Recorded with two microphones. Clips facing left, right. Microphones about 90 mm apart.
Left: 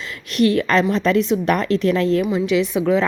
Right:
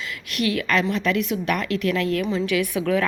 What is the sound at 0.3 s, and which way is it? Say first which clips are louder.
A woman's voice: left 6 dB; 35° left (ahead or behind).